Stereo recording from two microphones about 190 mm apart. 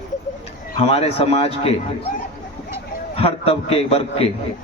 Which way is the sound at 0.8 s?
30° left (ahead or behind).